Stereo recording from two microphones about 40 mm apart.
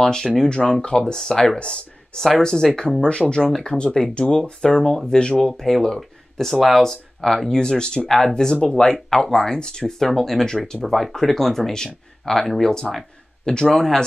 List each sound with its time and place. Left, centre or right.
0.0 s speech: centre
2.3 s speech: centre
9.9 s speech: centre